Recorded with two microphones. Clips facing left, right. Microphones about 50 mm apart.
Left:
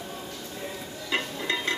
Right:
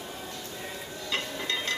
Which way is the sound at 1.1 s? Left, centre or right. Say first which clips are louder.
Left 3 dB; left.